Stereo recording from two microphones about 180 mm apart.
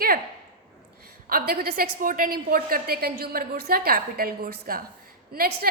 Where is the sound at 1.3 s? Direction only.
55° right (ahead or behind).